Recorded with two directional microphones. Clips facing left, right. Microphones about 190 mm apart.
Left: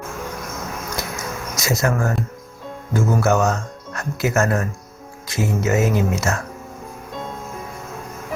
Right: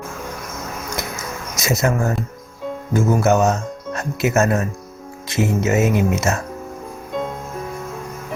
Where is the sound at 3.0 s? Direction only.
20° right (ahead or behind).